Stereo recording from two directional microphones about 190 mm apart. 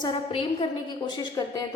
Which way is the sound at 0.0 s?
25° left (ahead or behind).